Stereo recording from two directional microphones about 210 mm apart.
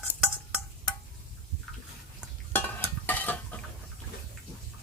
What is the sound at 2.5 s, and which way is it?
Stir, 10° left (ahead or behind).